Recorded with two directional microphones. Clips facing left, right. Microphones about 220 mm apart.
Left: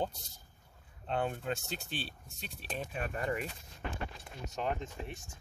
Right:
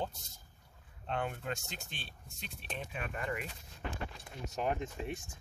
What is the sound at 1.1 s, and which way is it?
Speech, 30° left (ahead or behind).